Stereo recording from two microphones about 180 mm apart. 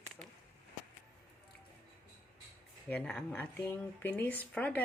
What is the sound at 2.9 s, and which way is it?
Speech, 5° left (ahead or behind).